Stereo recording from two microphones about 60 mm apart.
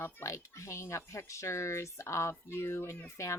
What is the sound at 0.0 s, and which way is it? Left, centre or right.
Speech, left.